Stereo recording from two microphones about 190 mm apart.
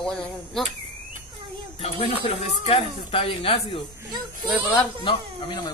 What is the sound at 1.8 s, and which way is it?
A woman's voice, 30° left (ahead or behind).